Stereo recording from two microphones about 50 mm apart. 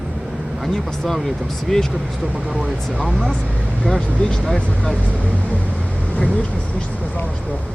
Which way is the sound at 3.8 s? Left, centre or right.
Centre.